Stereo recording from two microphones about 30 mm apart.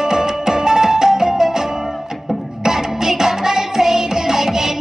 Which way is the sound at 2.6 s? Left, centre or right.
Centre.